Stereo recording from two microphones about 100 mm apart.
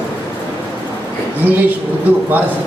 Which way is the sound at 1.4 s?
20° right (ahead or behind).